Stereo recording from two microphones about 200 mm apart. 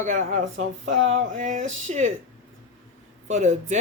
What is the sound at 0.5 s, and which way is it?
Speech, 70° right (ahead or behind).